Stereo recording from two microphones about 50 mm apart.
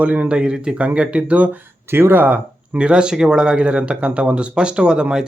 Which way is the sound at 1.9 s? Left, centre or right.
Right.